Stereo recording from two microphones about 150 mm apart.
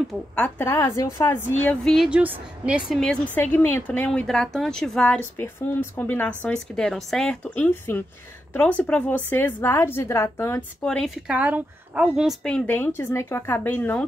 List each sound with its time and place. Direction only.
0.6 s speech: 15° left (ahead or behind)
1.9 s speech: 5° right (ahead or behind)
3.0 s speech: 10° left (ahead or behind)
10.9 s a woman's voice: 5° left (ahead or behind)
11.2 s speech: 10° right (ahead or behind)
12.4 s speech: 10° left (ahead or behind)